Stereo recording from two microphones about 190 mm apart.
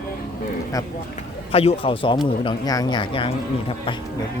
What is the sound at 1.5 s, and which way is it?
Speech, 30° left (ahead or behind).